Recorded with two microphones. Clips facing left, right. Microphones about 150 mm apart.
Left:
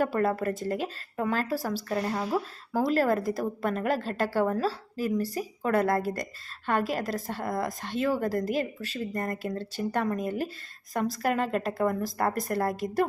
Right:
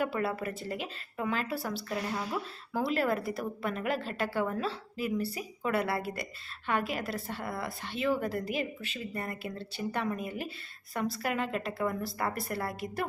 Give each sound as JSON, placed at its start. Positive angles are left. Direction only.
{"t": 0.0, "sound": "speech", "side_deg": 40}